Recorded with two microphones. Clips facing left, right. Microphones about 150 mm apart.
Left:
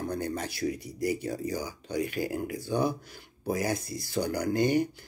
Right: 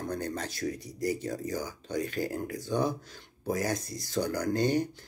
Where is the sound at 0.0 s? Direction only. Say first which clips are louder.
Left 2 dB; 10° left (ahead or behind).